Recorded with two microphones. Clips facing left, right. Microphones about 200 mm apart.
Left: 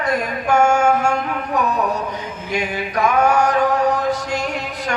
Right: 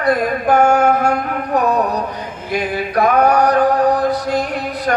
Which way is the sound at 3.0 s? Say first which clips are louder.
Right 3 dB; 35° right (ahead or behind).